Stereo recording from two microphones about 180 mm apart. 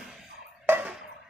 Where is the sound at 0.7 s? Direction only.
10° right (ahead or behind).